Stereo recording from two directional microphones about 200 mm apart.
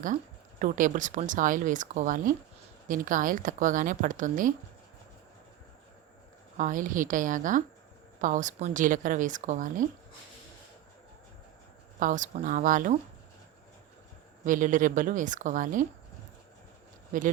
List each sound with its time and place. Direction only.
0.6 s a woman's voice: 40° right (ahead or behind)
6.6 s a woman's voice: 40° right (ahead or behind)
11.9 s a woman's voice: 40° right (ahead or behind)
14.4 s a woman's voice: 40° right (ahead or behind)
17.1 s speech: 40° right (ahead or behind)